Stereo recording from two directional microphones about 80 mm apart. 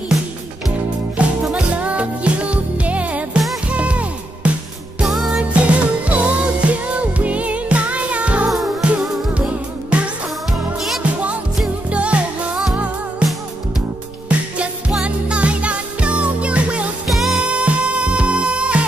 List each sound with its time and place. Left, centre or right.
0.7 s music: centre
5.0 s music: centre
5.4 s music: centre
14.9 s music: centre
17.1 s music: centre
17.4 s music: centre